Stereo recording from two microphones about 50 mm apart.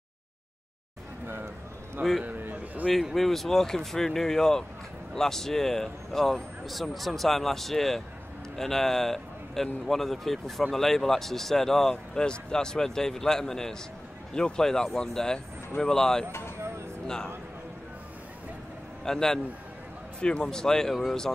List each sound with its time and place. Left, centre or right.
1.2 s a sound: right
2.2 s a sound: right
3.2 s a man's voice: centre
16.3 s speech: left
19.0 s a man's voice: centre
20.2 s speech: left
20.4 s a man's voice: centre